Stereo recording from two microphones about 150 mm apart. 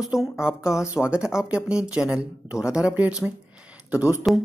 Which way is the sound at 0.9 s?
5° right (ahead or behind).